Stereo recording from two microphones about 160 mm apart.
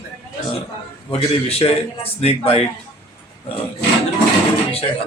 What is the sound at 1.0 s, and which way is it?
Speech, 35° left (ahead or behind).